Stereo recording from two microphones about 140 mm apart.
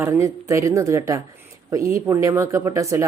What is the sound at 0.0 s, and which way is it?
A woman's voice, 20° right (ahead or behind).